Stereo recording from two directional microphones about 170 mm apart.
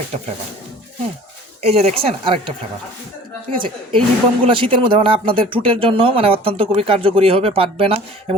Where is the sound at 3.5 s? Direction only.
30° right (ahead or behind).